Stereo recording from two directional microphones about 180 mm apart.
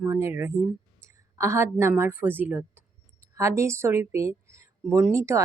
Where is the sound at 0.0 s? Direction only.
15° right (ahead or behind).